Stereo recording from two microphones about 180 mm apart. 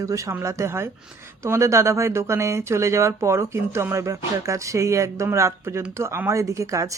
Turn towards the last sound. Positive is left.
turn(degrees=-15)  # may be behind; listen again after turning